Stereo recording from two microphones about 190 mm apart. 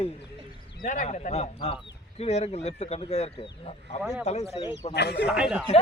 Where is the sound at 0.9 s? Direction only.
45° left (ahead or behind).